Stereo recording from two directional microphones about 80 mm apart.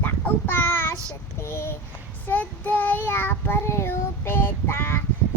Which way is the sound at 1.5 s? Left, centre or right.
Left.